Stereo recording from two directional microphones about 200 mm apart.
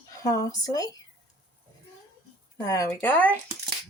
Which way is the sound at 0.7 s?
15° left (ahead or behind).